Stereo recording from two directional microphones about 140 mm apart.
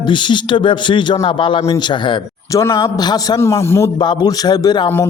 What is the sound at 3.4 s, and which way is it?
Speech, 20° left (ahead or behind).